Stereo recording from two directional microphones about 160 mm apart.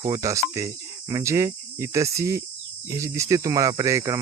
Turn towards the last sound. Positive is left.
turn(degrees=-20)  # may be behind; listen again after turning